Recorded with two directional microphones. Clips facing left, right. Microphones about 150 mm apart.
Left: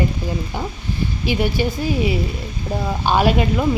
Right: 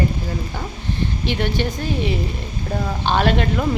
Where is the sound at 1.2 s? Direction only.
5° left (ahead or behind).